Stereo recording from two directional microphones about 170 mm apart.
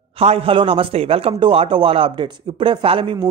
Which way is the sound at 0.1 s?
35° right (ahead or behind).